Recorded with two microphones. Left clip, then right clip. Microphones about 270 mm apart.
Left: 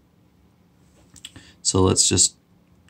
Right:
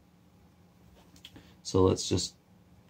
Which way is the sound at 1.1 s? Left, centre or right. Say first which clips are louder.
Left 10 dB; centre.